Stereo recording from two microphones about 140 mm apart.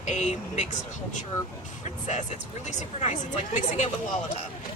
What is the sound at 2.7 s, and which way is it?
Speech, 55° left (ahead or behind).